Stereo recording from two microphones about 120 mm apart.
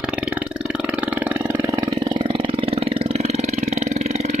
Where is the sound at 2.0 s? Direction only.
40° right (ahead or behind).